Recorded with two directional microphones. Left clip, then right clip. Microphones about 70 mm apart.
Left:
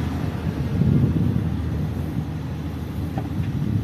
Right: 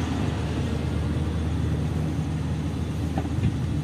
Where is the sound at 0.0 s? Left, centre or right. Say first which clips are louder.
Even; centre.